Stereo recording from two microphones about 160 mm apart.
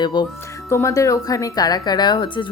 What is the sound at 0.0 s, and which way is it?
Speech, 30° left (ahead or behind).